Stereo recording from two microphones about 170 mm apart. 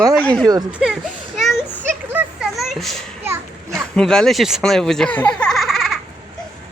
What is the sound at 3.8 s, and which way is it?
Speech, 5° left (ahead or behind).